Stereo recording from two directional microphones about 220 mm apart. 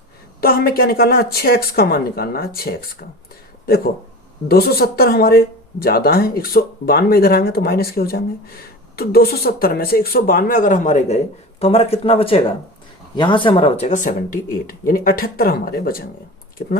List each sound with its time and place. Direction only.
0.4 s speech: 45° left (ahead or behind)
4.4 s speech: 45° left (ahead or behind)